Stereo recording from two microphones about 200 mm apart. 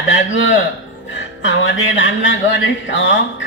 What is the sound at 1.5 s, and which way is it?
Speech, 70° left (ahead or behind).